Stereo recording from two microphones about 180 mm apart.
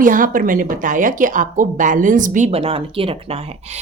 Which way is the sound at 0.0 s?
50° right (ahead or behind).